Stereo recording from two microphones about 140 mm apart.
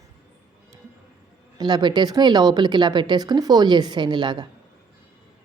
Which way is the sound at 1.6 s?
30° right (ahead or behind).